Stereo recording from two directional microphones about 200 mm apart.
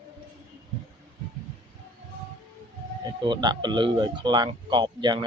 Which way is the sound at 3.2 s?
20° right (ahead or behind).